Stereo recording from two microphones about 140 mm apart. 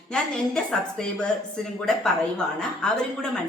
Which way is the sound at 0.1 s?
5° left (ahead or behind).